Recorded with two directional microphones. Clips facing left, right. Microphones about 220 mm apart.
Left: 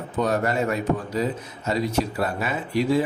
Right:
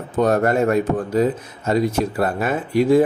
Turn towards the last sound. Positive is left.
turn(degrees=-50)  # may be behind; listen again after turning